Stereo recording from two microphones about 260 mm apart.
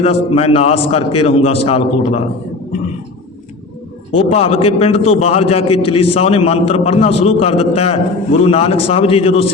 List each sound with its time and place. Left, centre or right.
0.0 s a man's voice: left
4.1 s a man's voice: left